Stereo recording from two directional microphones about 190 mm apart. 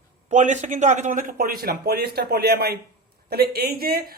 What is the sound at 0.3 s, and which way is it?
Speech, 40° right (ahead or behind).